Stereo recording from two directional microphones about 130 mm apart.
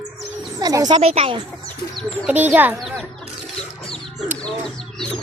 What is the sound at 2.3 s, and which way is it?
Speech, 15° right (ahead or behind).